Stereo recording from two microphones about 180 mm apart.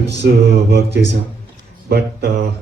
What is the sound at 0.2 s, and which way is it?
Music, 65° right (ahead or behind).